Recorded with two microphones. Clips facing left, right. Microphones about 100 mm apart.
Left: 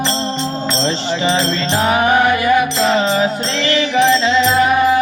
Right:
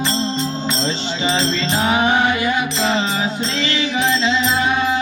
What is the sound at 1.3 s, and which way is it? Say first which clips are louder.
Music: left 2 dB; 30° left (ahead or behind).